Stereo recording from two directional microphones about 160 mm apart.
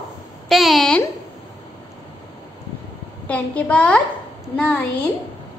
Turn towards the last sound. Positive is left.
turn(degrees=10)  # may be behind; listen again after turning